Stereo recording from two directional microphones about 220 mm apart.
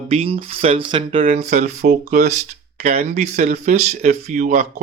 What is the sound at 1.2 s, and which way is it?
Speech, 35° right (ahead or behind).